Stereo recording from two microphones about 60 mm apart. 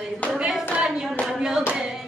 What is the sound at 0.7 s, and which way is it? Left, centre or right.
Hands, centre.